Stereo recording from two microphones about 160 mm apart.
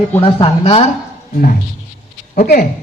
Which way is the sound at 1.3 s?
60° left (ahead or behind).